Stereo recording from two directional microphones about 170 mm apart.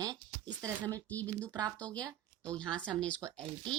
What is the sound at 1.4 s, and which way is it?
Speech, 20° right (ahead or behind).